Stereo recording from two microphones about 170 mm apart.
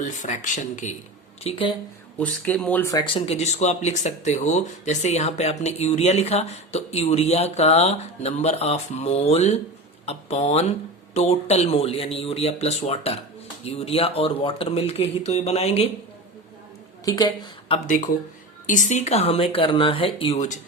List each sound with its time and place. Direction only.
0.0 s speech: 50° left (ahead or behind)
1.5 s speech: 30° left (ahead or behind)
2.1 s speech: 10° left (ahead or behind)
2.9 s speech: 30° left (ahead or behind)
17.2 s speech: 25° left (ahead or behind)
17.8 s speech: 50° left (ahead or behind)